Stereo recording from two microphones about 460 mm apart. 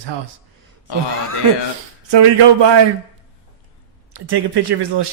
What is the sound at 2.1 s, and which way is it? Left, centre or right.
Speech, right.